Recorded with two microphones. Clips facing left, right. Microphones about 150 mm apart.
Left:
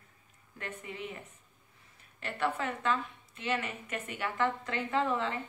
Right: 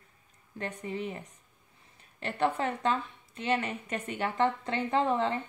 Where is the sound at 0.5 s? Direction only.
35° right (ahead or behind).